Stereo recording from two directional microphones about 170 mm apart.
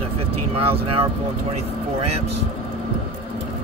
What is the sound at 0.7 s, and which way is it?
Speech, 35° right (ahead or behind).